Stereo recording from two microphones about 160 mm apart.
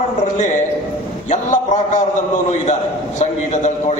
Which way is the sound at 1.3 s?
50° left (ahead or behind).